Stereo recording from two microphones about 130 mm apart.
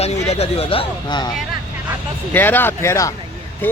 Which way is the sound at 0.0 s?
55° left (ahead or behind).